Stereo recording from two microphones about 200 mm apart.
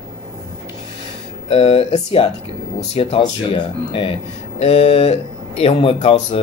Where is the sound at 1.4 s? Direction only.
30° left (ahead or behind).